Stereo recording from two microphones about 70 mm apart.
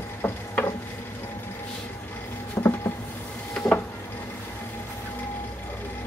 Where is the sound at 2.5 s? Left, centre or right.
Left.